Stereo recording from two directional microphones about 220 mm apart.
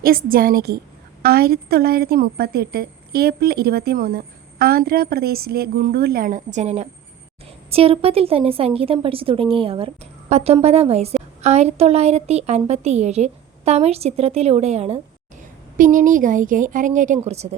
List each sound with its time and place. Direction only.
0.0 s a woman's voice: 40° right (ahead or behind)